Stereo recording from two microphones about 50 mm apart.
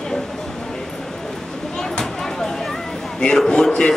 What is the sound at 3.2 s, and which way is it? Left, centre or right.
Speech, centre.